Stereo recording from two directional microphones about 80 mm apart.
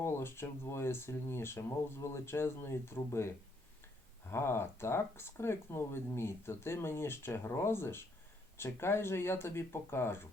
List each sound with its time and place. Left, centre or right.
0.0 s speech: left